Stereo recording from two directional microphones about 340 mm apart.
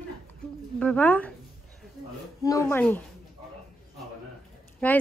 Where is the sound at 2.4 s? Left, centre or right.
Centre.